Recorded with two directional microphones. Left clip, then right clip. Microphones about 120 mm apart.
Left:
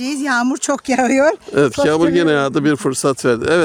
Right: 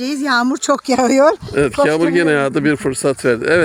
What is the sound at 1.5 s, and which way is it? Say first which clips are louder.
Speech: even; 45° left (ahead or behind).